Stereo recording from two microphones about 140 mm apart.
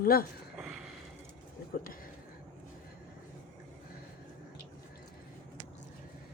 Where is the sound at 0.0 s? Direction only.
90° left.